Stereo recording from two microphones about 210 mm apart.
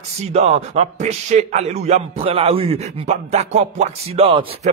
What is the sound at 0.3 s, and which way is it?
A man's voice, 30° right (ahead or behind).